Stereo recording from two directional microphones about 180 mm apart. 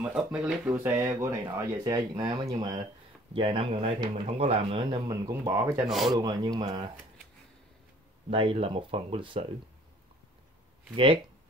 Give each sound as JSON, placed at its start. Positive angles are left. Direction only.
{"t": 0.0, "sound": "speech", "side_deg": -5}
{"t": 5.9, "sound": "speech", "side_deg": 0}
{"t": 6.1, "sound": "speech", "side_deg": -20}
{"t": 8.3, "sound": "speech", "side_deg": -30}